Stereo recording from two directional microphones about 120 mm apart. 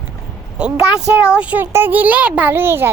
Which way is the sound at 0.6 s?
10° right (ahead or behind).